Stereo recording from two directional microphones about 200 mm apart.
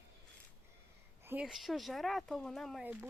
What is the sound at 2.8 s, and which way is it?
Speech, 10° right (ahead or behind).